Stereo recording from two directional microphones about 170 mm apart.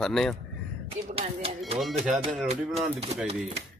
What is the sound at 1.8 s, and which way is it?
Speech, centre (ahead or behind).